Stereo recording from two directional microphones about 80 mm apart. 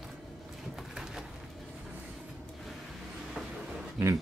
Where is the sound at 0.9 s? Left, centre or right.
Centre.